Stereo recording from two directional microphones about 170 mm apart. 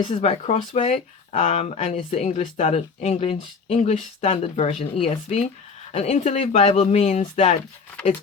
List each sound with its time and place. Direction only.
0.0 s speech: 35° left (ahead or behind)